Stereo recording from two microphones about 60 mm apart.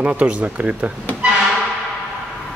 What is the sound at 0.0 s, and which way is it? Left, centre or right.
Speech, centre.